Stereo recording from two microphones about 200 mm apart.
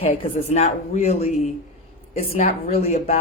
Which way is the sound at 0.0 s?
30° left (ahead or behind).